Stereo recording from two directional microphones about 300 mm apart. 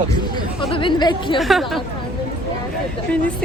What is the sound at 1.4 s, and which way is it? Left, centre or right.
Speech, centre.